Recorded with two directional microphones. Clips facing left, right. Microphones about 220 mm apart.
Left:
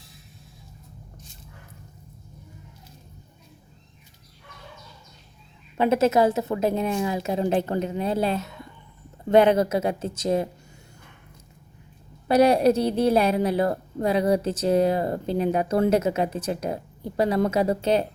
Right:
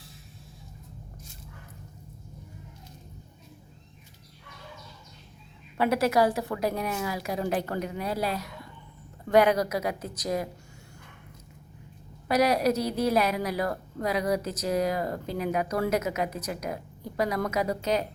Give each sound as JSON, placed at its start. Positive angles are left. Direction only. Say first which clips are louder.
{"t": 5.7, "sound": "a woman's voice", "louder": "left 4 dB", "side_deg": 25}
{"t": 12.3, "sound": "a woman's voice", "louder": "left 6 dB", "side_deg": 30}